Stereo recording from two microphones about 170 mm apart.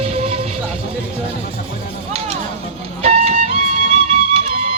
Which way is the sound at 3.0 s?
35° right (ahead or behind).